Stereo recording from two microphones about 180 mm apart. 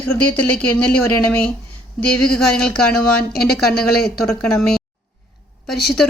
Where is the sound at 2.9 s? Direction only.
60° left (ahead or behind).